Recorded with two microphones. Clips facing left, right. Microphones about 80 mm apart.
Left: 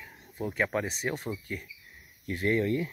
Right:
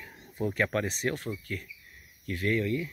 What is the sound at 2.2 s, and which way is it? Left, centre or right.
Speech, left.